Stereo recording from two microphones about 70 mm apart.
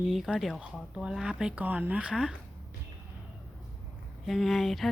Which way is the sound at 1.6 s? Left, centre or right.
Right.